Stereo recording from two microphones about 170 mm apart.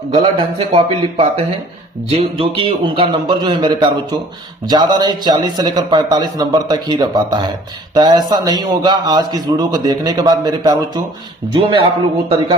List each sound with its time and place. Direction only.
0.1 s a man's voice: 35° right (ahead or behind)